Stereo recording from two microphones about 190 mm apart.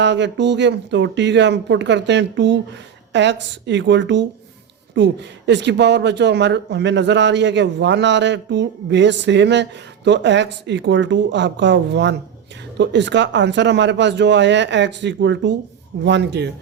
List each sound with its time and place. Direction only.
0.0 s a man's voice: 70° right (ahead or behind)